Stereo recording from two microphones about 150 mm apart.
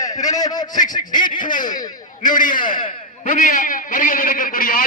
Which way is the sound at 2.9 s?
55° left (ahead or behind).